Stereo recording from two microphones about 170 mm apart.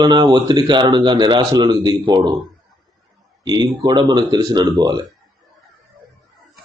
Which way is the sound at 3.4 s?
25° right (ahead or behind).